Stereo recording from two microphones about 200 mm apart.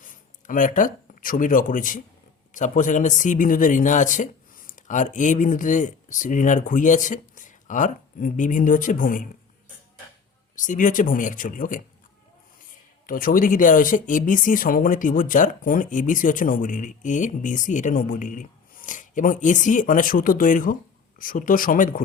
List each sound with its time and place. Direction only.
0.0 s speech: 40° left (ahead or behind)
10.5 s speech: 40° left (ahead or behind)
13.1 s speech: 45° left (ahead or behind)